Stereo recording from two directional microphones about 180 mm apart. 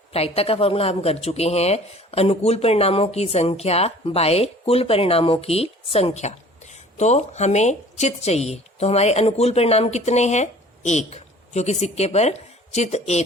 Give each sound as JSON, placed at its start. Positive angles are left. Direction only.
{"t": 0.1, "sound": "speech", "side_deg": 35}